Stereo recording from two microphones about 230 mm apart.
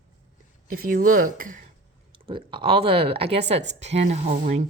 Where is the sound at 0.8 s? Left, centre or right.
Right.